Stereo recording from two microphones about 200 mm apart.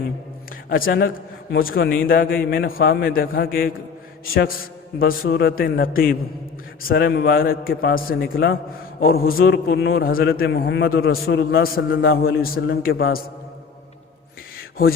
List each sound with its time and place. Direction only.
0.7 s a man's voice: 45° left (ahead or behind)
4.9 s a man's voice: 50° left (ahead or behind)